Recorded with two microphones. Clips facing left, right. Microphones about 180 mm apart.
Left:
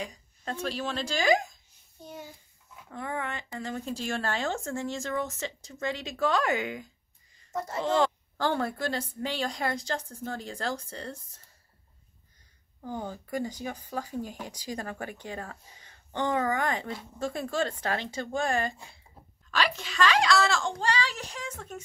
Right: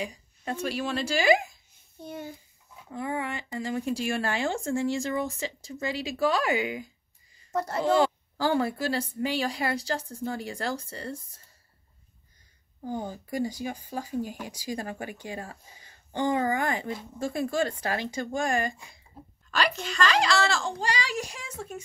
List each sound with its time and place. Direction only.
0.0 s speech: 10° right (ahead or behind)
2.0 s a sound: 55° right (ahead or behind)
2.9 s speech: 10° right (ahead or behind)
7.5 s speech: 70° right (ahead or behind)
7.8 s speech: 10° right (ahead or behind)
12.8 s speech: 15° right (ahead or behind)
19.5 s a woman's voice: centre (ahead or behind)
20.8 s speech: 10° right (ahead or behind)